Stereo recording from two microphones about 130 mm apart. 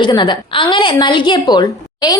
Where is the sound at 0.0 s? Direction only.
35° left (ahead or behind).